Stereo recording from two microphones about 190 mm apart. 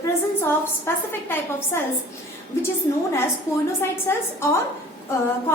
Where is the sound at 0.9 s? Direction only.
15° left (ahead or behind).